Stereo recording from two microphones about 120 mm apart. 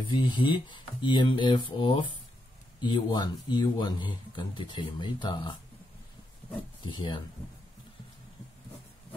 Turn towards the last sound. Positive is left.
turn(degrees=40)  # may be behind; listen again after turning